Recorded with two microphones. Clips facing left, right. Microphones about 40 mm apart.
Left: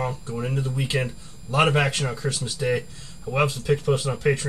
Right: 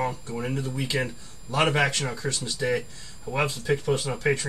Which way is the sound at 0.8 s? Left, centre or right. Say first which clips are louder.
Left 1 dB; left.